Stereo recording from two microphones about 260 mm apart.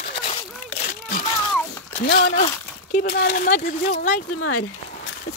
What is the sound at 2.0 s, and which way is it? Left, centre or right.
Speech, left.